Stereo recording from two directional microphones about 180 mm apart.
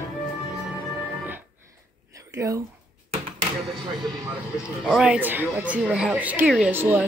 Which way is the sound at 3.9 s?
25° right (ahead or behind).